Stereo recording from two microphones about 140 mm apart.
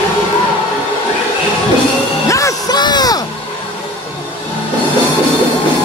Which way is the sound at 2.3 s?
20° left (ahead or behind).